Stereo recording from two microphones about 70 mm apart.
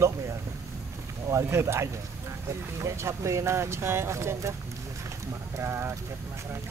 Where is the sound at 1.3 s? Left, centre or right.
Right.